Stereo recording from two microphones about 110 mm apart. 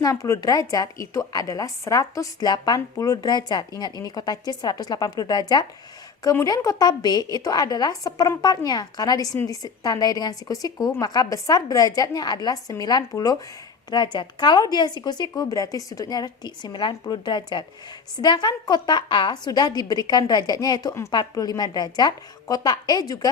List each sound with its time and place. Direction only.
0.0 s speech: 30° left (ahead or behind)